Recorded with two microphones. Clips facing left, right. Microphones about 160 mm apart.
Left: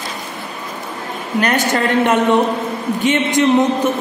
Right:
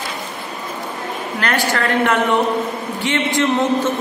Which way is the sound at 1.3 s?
20° left (ahead or behind).